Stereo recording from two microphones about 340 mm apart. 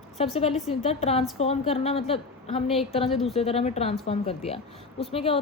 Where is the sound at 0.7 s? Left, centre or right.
Centre.